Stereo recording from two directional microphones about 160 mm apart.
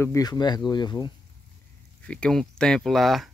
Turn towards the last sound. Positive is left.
turn(degrees=0)  # may be behind; listen again after turning